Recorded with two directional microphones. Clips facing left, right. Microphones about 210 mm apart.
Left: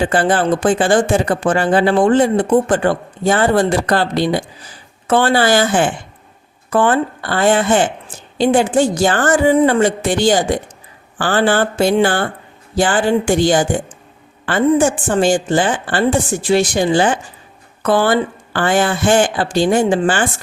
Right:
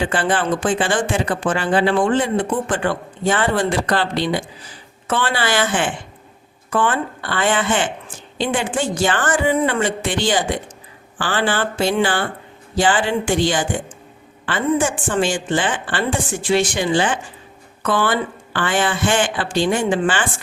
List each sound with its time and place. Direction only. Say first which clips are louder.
0.0 s speech: left 5 dB; 40° left (ahead or behind)